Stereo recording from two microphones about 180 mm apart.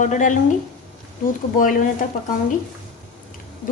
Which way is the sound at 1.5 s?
50° left (ahead or behind).